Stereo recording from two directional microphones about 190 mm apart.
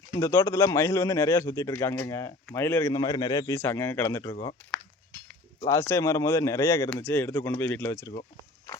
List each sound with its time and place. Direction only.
0.2 s a man's voice: 15° left (ahead or behind)
5.6 s a man's voice: 15° left (ahead or behind)